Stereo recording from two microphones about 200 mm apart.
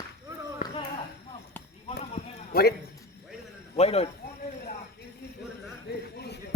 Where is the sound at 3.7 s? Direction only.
30° left (ahead or behind).